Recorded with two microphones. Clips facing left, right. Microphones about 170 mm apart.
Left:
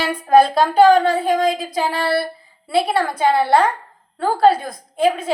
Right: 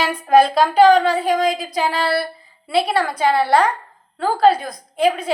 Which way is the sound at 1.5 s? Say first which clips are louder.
Even; 25° left (ahead or behind).